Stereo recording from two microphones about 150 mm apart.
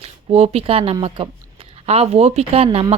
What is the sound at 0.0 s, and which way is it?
A woman's voice, 40° right (ahead or behind).